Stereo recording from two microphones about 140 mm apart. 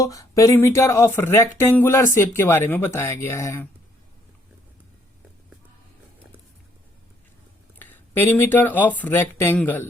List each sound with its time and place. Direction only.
0.0 s speech: 25° left (ahead or behind)
7.8 s speech: 15° left (ahead or behind)